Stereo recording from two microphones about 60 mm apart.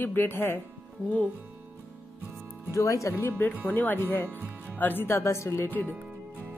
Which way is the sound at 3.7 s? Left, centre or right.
Left.